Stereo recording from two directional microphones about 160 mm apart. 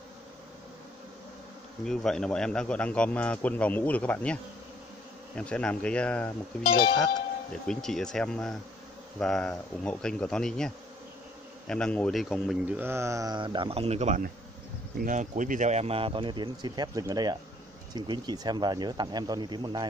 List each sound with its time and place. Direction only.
1.9 s a man's voice: 5° left (ahead or behind)
6.6 s speech: 30° left (ahead or behind)
7.6 s speech: 5° left (ahead or behind)
12.7 s speech: 15° right (ahead or behind)